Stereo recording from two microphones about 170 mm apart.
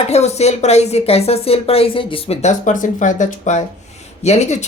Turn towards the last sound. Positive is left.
turn(degrees=40)  # may be behind; listen again after turning